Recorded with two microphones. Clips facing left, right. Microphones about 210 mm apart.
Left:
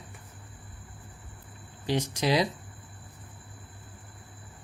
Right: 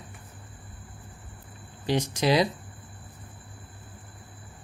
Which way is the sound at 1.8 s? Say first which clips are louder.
Right 3 dB; 70° right (ahead or behind).